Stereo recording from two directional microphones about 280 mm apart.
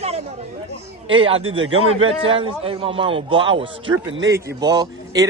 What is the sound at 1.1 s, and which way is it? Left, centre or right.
A man's voice, centre.